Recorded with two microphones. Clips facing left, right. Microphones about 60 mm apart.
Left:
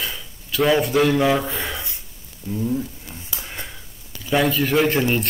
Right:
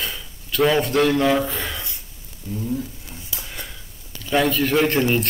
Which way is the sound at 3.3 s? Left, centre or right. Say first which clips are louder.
Left 1 dB; left.